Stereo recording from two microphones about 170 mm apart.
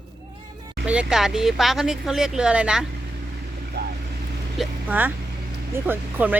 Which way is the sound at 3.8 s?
75° right (ahead or behind).